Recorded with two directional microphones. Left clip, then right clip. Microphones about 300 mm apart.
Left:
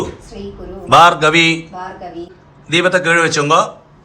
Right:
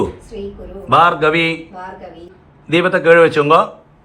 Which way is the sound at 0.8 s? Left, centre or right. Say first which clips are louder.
Left 3 dB; centre.